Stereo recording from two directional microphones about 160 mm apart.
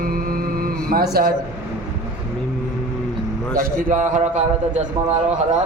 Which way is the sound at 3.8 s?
50° right (ahead or behind).